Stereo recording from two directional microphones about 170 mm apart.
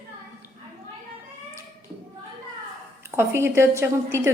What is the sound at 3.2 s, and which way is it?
A woman's voice, 15° right (ahead or behind).